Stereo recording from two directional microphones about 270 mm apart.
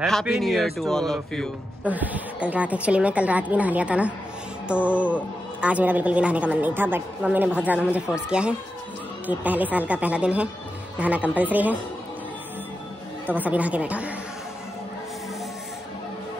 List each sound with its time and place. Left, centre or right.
0.0 s a man's voice: centre
13.3 s a man's voice: centre